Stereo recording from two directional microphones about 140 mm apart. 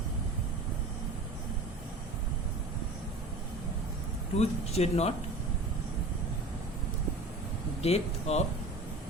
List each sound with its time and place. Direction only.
4.4 s speech: 50° left (ahead or behind)
7.8 s speech: 50° left (ahead or behind)